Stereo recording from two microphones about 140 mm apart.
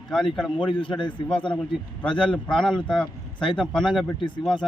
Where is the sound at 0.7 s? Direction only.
35° left (ahead or behind).